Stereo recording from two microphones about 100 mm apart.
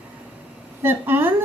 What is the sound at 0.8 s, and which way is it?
Speech, 20° right (ahead or behind).